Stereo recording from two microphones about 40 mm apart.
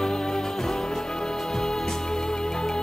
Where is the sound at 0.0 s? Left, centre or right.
Centre.